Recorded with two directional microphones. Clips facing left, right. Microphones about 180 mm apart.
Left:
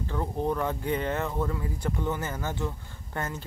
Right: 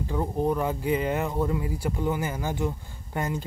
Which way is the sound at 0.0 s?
10° right (ahead or behind).